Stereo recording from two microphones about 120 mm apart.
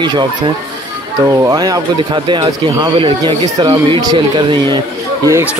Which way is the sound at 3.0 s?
40° right (ahead or behind).